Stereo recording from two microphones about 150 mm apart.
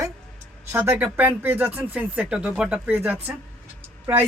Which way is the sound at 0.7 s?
15° right (ahead or behind).